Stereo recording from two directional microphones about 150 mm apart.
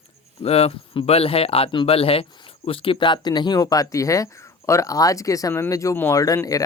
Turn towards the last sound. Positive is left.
turn(degrees=20)  # may be behind; listen again after turning